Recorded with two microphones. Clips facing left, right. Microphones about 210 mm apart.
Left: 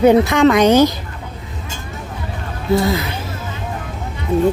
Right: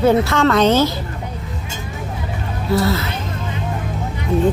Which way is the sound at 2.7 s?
15° left (ahead or behind).